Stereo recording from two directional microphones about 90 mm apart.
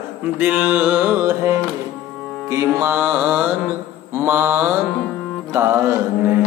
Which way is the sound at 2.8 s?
25° right (ahead or behind).